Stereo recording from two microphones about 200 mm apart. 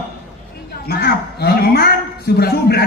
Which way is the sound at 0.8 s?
50° left (ahead or behind).